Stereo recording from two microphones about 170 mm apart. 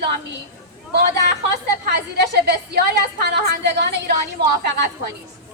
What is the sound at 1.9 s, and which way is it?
A woman's voice, 75° right (ahead or behind).